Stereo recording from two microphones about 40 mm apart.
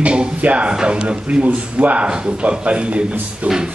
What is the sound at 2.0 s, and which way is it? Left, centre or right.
Speech, right.